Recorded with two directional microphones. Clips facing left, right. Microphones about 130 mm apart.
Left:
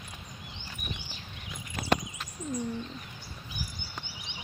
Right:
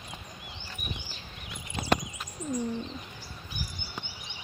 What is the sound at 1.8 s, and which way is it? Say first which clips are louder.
Horse: right 1 dB; 25° right (ahead or behind).